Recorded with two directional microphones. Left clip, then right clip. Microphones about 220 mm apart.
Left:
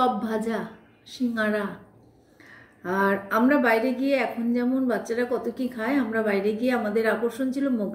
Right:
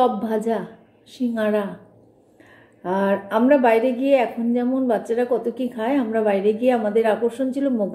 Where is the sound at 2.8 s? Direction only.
Centre (ahead or behind).